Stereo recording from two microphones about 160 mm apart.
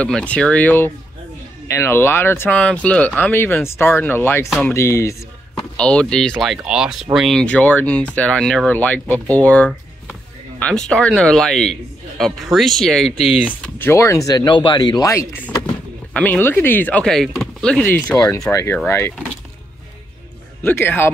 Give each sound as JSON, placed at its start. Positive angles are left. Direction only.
{"t": 0.0, "sound": "speech", "side_deg": 10}
{"t": 5.8, "sound": "a man's voice", "side_deg": 5}
{"t": 13.5, "sound": "speech", "side_deg": 15}
{"t": 18.1, "sound": "speech", "side_deg": 20}
{"t": 20.6, "sound": "speech", "side_deg": 15}